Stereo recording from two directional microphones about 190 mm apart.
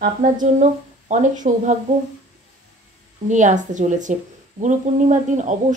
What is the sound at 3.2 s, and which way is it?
A woman's voice, 40° right (ahead or behind).